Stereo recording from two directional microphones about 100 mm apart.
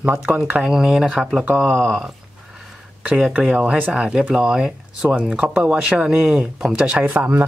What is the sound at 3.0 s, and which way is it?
Speech, 15° right (ahead or behind).